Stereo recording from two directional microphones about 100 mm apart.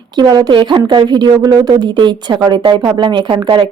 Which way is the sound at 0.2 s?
45° right (ahead or behind).